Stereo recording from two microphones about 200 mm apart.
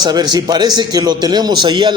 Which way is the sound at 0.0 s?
20° right (ahead or behind).